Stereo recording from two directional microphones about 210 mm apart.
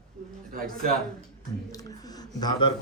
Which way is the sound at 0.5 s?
45° right (ahead or behind).